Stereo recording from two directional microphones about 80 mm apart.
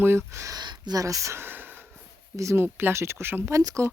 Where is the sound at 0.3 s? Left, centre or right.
Right.